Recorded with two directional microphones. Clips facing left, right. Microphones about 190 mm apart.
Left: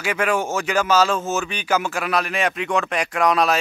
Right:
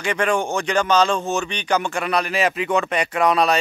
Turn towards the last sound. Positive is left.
turn(degrees=0)  # may be behind; listen again after turning